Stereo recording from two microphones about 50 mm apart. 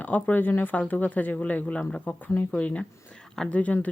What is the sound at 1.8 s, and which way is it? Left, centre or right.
Speech, centre.